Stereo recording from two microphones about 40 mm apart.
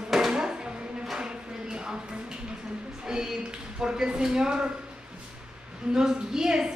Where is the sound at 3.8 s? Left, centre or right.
Centre.